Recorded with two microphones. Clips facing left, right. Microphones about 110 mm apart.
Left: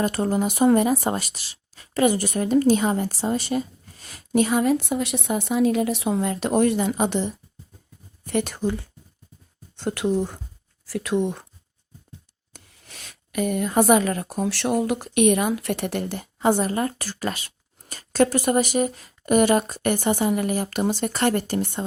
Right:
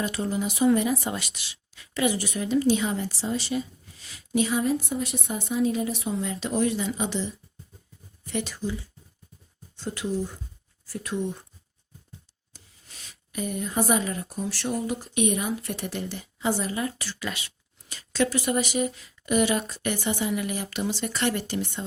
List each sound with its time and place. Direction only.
0.0 s speech: 50° left (ahead or behind)
10.8 s speech: 90° left
12.5 s speech: 65° left (ahead or behind); by 21.7 s 45° left (ahead or behind)